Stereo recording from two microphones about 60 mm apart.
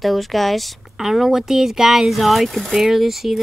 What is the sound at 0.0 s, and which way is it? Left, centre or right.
Speech, centre.